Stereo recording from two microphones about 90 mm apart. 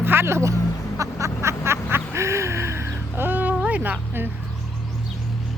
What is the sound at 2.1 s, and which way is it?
Gasp, 30° right (ahead or behind).